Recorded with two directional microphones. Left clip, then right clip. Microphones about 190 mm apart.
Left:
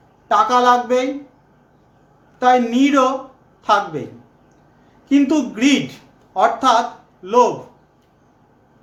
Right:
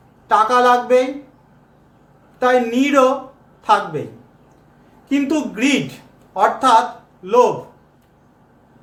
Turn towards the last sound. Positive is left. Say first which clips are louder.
# even
turn(degrees=15)  # may be behind; listen again after turning